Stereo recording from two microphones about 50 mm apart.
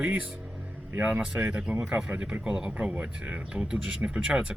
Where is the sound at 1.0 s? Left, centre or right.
Right.